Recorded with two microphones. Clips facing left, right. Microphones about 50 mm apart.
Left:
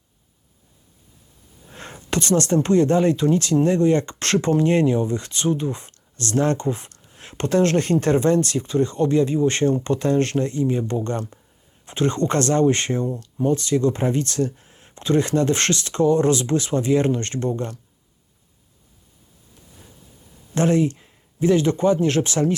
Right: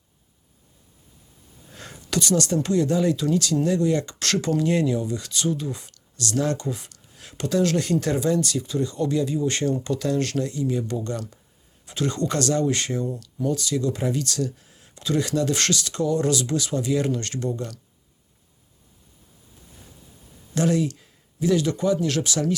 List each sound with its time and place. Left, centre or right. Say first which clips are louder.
1.7 s speech: left 2 dB; left
20.6 s speech: left 3 dB; left